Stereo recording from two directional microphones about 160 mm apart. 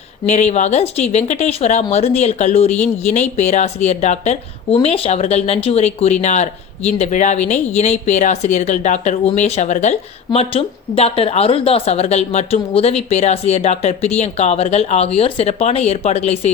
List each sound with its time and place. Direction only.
0.3 s speech: 45° left (ahead or behind)